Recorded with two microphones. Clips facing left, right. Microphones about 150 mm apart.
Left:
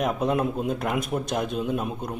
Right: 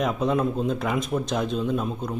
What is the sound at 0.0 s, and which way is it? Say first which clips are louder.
A man's voice: right 1 dB; 5° left (ahead or behind).